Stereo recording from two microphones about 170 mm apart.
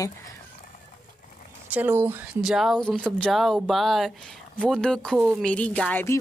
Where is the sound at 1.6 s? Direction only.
10° right (ahead or behind).